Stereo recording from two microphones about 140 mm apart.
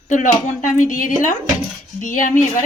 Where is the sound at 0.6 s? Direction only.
65° left (ahead or behind).